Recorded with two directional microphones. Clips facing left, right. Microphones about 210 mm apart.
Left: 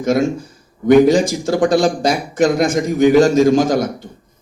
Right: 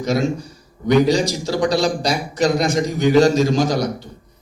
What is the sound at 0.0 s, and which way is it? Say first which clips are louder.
A man's voice: left 4 dB; 50° left (ahead or behind).